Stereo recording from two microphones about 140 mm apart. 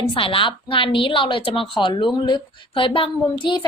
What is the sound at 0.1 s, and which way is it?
A woman's voice, 40° left (ahead or behind).